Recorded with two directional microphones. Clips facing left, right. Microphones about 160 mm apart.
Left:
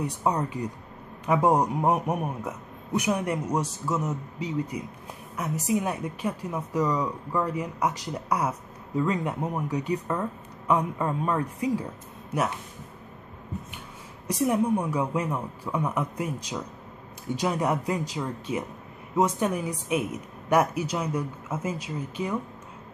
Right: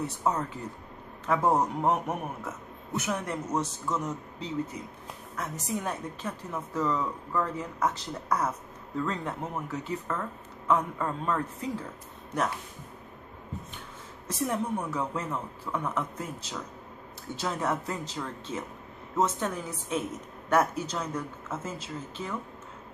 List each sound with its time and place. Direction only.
0.0 s a woman's voice: 15° left (ahead or behind)
14.2 s a woman's voice: 15° left (ahead or behind)